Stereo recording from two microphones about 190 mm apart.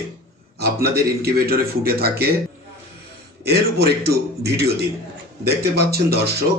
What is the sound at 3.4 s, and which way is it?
A man's voice, 60° right (ahead or behind).